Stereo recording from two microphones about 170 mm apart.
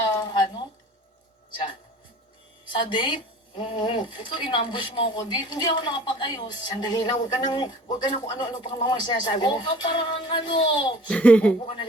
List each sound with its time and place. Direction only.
0.1 s a sound: 25° left (ahead or behind)
2.7 s a woman's voice: 30° left (ahead or behind)
11.1 s speech: 10° left (ahead or behind)
11.6 s speech: 30° left (ahead or behind)